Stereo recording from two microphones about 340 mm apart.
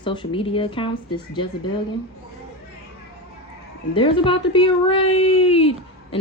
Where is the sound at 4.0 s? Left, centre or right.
Centre.